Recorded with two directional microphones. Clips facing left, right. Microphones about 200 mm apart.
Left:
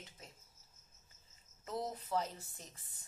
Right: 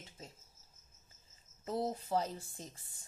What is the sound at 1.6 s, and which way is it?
A woman's voice, 30° right (ahead or behind).